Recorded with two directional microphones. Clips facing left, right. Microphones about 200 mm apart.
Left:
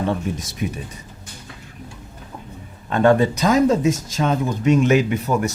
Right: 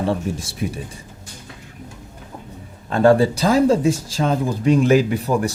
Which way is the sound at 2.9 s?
35° right (ahead or behind).